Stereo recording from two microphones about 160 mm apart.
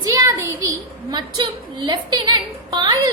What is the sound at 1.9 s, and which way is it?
A woman's voice, 25° right (ahead or behind).